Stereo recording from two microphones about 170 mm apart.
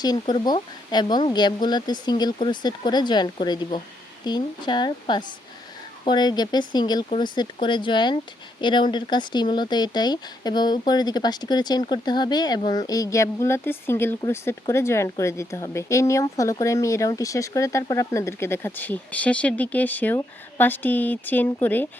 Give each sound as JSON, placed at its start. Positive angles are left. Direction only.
{"t": 0.0, "sound": "speech", "side_deg": 25}